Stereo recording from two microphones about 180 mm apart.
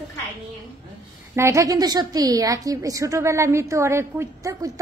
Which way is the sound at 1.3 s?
15° right (ahead or behind).